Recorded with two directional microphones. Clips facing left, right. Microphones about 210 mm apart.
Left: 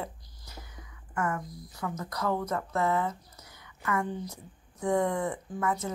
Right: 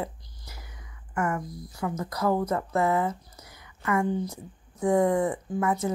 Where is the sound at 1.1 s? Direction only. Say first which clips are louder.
Right 3 dB; 30° right (ahead or behind).